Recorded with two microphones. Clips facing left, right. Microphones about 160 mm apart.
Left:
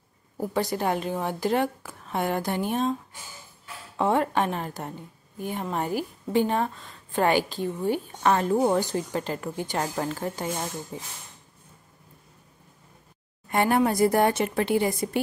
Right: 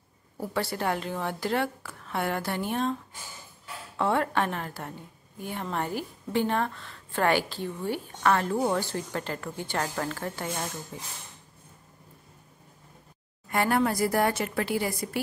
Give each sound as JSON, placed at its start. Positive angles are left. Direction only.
{"t": 0.4, "sound": "a woman's voice", "side_deg": 15}
{"t": 13.5, "sound": "a woman's voice", "side_deg": 20}